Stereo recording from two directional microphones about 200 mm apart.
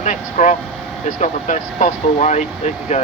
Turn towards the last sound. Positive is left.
turn(degrees=35)  # may be behind; listen again after turning